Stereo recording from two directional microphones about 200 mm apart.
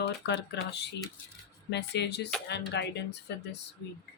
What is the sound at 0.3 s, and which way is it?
Speech, 60° left (ahead or behind).